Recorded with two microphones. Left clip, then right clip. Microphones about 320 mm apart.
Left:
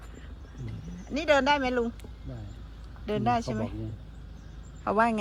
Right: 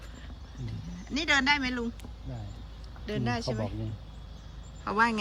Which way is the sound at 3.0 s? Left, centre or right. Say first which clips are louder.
Left 6 dB; centre.